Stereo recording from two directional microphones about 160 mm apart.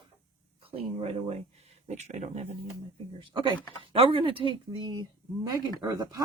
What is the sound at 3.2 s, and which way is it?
Speech, 30° right (ahead or behind).